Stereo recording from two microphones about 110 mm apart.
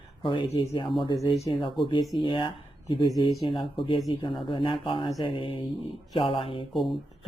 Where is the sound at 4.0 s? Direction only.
40° left (ahead or behind).